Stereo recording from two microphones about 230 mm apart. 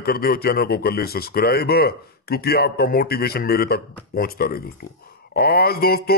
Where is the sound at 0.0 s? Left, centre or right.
Left.